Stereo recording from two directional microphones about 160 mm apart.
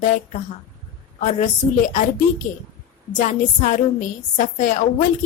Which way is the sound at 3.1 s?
50° left (ahead or behind).